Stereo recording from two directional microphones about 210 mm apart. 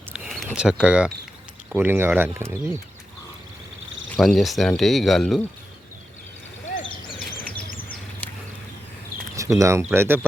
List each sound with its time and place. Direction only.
0.1 s cricket: centre (ahead or behind)
1.7 s speech: 10° right (ahead or behind)
4.1 s speech: centre (ahead or behind)
7.3 s a sound: 45° left (ahead or behind)
8.2 s a sound: 5° left (ahead or behind)
9.6 s speech: 15° right (ahead or behind)